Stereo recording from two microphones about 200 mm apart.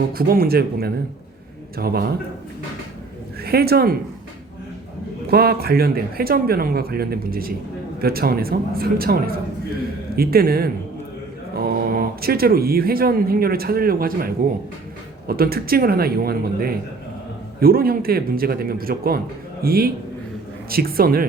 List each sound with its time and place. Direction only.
0.1 s speech: 50° right (ahead or behind)
3.4 s speech: 50° right (ahead or behind)
5.3 s speech: 50° right (ahead or behind)